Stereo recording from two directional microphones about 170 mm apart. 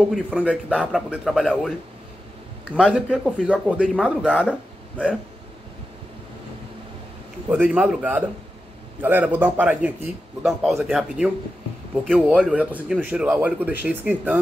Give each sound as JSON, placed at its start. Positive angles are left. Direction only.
{"t": 0.1, "sound": "a man's voice", "side_deg": -5}
{"t": 2.7, "sound": "a man's voice", "side_deg": -5}
{"t": 7.4, "sound": "a man's voice", "side_deg": -10}